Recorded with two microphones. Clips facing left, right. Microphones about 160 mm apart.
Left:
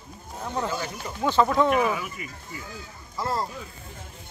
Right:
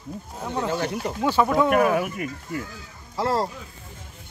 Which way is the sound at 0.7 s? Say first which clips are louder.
Right 5 dB; 65° right (ahead or behind).